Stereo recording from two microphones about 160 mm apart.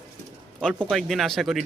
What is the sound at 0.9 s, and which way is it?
Speech, centre (ahead or behind).